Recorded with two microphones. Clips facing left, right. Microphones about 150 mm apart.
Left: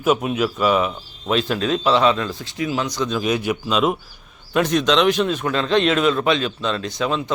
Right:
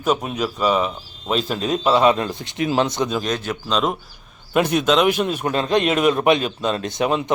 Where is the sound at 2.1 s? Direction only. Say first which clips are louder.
Right 1 dB; 20° right (ahead or behind).